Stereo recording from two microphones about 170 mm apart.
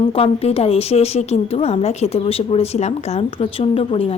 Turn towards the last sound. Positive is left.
turn(degrees=35)  # may be behind; listen again after turning